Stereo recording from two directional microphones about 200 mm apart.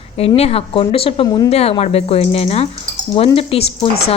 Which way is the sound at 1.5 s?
30° left (ahead or behind).